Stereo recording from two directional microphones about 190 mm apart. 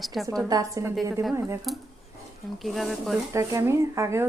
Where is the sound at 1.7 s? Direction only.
Centre (ahead or behind).